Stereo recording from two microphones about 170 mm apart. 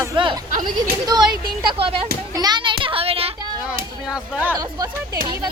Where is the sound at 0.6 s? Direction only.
25° right (ahead or behind).